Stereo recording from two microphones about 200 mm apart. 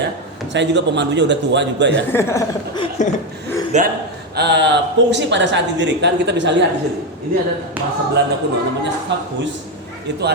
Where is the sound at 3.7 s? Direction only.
35° right (ahead or behind).